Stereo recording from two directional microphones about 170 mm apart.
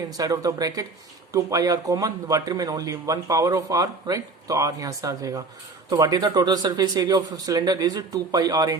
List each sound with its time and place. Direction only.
0.2 s speech: 20° right (ahead or behind)